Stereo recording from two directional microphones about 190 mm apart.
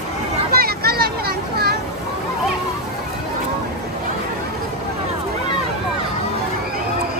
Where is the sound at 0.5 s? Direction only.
55° right (ahead or behind).